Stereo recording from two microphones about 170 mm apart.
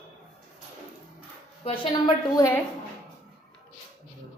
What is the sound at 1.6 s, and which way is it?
Speech, 30° left (ahead or behind).